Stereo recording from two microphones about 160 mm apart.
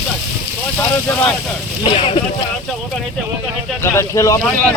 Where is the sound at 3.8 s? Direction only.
15° left (ahead or behind).